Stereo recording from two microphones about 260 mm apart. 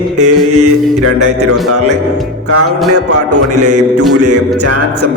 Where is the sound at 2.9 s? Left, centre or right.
Right.